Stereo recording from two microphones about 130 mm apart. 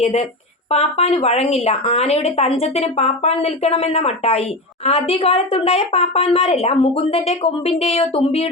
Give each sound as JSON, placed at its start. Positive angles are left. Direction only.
{"t": 0.0, "sound": "speech", "side_deg": 55}